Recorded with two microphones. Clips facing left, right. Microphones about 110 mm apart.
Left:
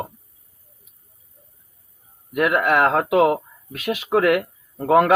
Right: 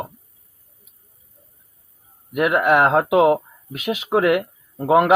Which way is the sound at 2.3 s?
20° right (ahead or behind).